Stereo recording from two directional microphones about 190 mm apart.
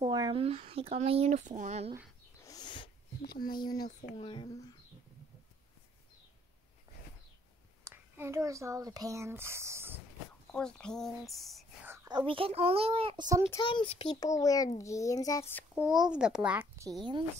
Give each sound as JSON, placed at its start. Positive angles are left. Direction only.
{"t": 0.0, "sound": "speech", "side_deg": -25}
{"t": 2.4, "sound": "a sound", "side_deg": 20}
{"t": 3.2, "sound": "speech", "side_deg": 50}
{"t": 3.5, "sound": "speech", "side_deg": 20}
{"t": 7.8, "sound": "speech", "side_deg": -15}
{"t": 10.5, "sound": "speech", "side_deg": 5}
{"t": 11.9, "sound": "a child's voice", "side_deg": -20}
{"t": 13.6, "sound": "a child's voice", "side_deg": 25}
{"t": 15.7, "sound": "a child's voice", "side_deg": -5}